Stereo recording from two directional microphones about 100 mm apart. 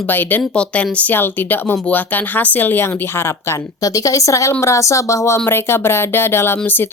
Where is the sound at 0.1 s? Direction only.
20° left (ahead or behind).